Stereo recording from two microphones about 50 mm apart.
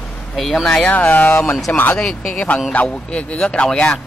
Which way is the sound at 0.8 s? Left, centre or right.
Left.